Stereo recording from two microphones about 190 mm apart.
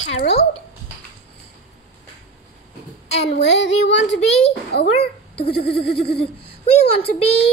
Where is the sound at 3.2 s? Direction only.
65° left (ahead or behind).